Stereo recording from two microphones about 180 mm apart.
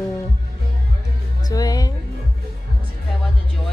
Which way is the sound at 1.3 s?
20° left (ahead or behind).